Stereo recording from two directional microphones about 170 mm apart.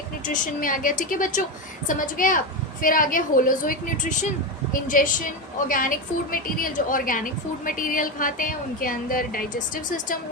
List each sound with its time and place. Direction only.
0.4 s a woman's voice: 55° left (ahead or behind)